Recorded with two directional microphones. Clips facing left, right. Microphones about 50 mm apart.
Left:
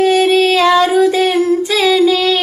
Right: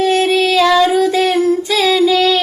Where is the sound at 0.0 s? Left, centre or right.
Left.